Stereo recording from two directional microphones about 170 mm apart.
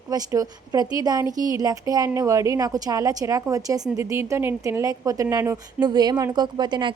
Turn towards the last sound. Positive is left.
turn(degrees=-25)  # may be behind; listen again after turning